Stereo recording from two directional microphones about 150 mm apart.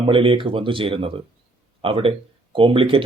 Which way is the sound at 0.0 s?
35° right (ahead or behind).